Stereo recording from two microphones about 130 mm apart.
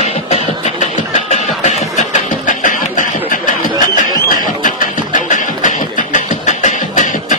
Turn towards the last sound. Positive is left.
turn(degrees=70)  # may be behind; listen again after turning